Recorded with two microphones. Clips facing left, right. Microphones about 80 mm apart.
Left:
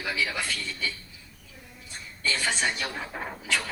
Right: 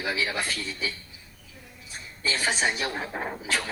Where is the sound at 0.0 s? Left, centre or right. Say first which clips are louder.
Right 1 dB; centre.